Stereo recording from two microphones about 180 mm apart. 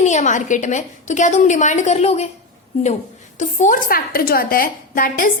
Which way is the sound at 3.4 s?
45° left (ahead or behind).